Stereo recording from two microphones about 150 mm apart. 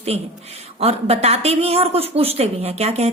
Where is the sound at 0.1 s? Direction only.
45° right (ahead or behind).